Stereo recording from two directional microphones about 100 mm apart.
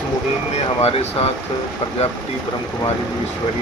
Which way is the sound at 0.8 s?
85° left.